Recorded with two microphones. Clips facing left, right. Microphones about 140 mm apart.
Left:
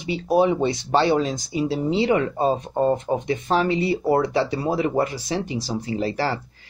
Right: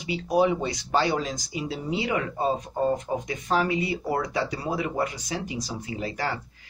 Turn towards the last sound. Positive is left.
turn(degrees=35)  # may be behind; listen again after turning